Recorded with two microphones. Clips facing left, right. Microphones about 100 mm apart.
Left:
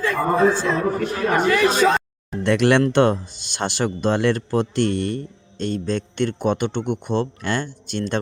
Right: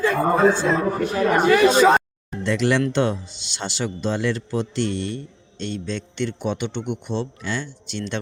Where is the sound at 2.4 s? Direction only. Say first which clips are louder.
Left 4 dB; 60° left (ahead or behind).